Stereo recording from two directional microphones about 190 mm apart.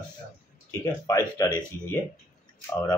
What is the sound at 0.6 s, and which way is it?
Speech, 20° left (ahead or behind).